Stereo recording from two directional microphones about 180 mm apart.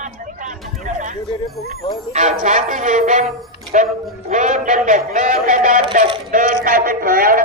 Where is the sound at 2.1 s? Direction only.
45° right (ahead or behind).